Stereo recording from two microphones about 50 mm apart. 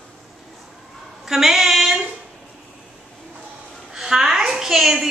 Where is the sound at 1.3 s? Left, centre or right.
Centre.